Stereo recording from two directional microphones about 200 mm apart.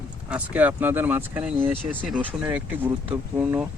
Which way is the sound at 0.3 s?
5° right (ahead or behind).